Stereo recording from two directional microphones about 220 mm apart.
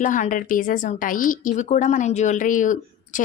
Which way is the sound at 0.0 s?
35° left (ahead or behind).